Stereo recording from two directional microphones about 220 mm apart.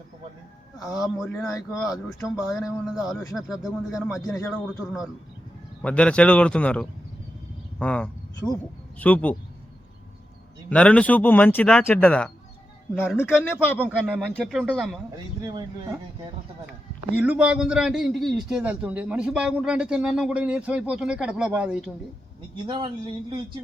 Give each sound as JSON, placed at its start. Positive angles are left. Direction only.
{"t": 1.0, "sound": "a man's voice", "side_deg": 0}
{"t": 1.5, "sound": "speech", "side_deg": 15}
{"t": 1.8, "sound": "a man's voice", "side_deg": 0}
{"t": 4.4, "sound": "a man's voice", "side_deg": 10}
{"t": 10.7, "sound": "a man's voice", "side_deg": 5}
{"t": 17.2, "sound": "a man's voice", "side_deg": -5}
{"t": 22.6, "sound": "speech", "side_deg": -20}